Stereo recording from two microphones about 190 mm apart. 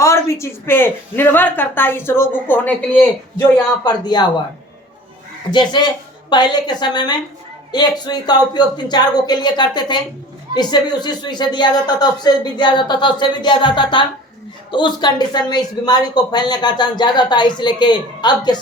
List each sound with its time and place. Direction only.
0.0 s speech: 15° left (ahead or behind)
4.0 s speech: 20° left (ahead or behind)
5.5 s speech: 25° left (ahead or behind)